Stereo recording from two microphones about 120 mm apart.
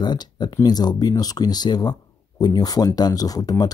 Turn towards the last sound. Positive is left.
turn(degrees=30)  # may be behind; listen again after turning